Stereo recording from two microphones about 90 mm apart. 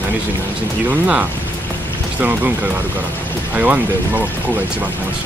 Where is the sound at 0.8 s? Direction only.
15° right (ahead or behind).